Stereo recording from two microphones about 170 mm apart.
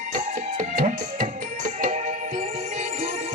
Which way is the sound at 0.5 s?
55° right (ahead or behind).